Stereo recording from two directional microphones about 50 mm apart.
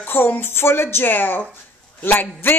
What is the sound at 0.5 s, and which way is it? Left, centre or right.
Speech, left.